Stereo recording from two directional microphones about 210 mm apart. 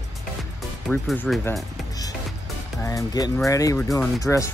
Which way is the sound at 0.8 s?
5° left (ahead or behind).